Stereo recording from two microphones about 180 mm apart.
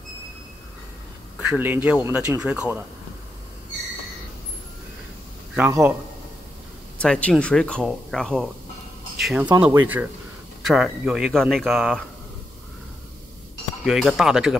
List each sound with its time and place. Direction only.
1.5 s speech: 10° right (ahead or behind)
5.7 s speech: 15° right (ahead or behind)
7.0 s speech: 5° left (ahead or behind)
13.8 s speech: centre (ahead or behind)